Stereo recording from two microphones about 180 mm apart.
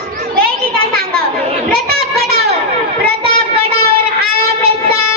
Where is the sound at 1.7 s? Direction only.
60° right (ahead or behind).